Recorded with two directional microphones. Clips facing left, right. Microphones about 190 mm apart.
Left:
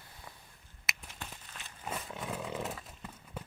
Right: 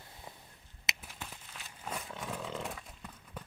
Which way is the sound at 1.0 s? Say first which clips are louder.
Even; centre (ahead or behind).